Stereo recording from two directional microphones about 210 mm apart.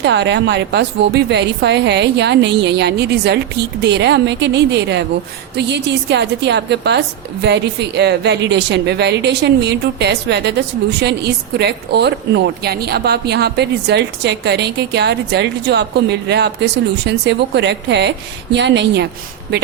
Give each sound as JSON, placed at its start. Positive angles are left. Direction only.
{"t": 0.0, "sound": "a woman's voice", "side_deg": -55}